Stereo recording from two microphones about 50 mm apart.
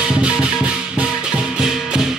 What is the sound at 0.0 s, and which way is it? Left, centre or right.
Music, centre.